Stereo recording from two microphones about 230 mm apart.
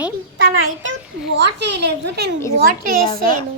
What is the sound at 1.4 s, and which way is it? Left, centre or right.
Speech, right.